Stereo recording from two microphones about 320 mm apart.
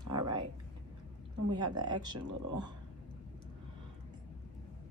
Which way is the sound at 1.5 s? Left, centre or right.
Centre.